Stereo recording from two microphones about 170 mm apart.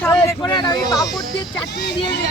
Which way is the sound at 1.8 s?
80° left.